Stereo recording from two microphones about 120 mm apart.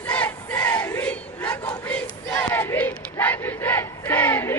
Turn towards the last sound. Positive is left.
turn(degrees=20)  # may be behind; listen again after turning